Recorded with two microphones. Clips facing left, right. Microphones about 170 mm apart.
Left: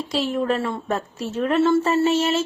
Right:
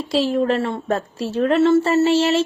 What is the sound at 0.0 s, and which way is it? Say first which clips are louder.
Speech: right 4 dB; 35° right (ahead or behind).